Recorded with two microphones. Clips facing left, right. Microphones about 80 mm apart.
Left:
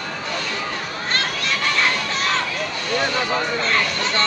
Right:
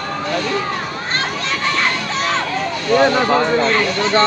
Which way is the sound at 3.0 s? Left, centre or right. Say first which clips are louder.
Right 9 dB; right.